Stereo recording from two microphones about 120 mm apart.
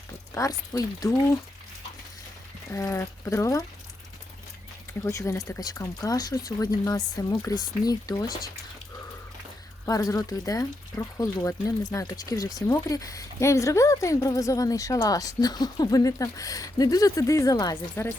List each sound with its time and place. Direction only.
0.3 s speech: 30° left (ahead or behind)
2.7 s speech: 25° left (ahead or behind)
5.0 s speech: 25° left (ahead or behind)
9.8 s speech: 30° left (ahead or behind)
18.0 s speech: 20° left (ahead or behind)